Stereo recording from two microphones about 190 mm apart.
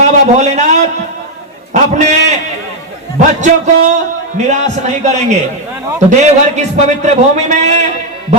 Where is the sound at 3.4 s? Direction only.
40° right (ahead or behind).